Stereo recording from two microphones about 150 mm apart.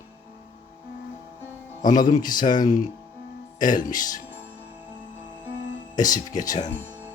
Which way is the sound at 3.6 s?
65° left (ahead or behind).